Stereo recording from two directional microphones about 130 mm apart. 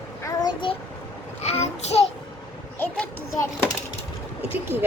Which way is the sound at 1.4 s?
55° left (ahead or behind).